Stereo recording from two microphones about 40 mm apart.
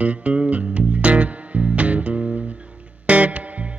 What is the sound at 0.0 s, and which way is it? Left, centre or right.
Music, right.